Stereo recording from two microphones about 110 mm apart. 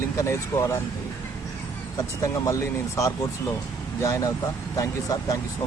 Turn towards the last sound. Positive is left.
turn(degrees=35)  # may be behind; listen again after turning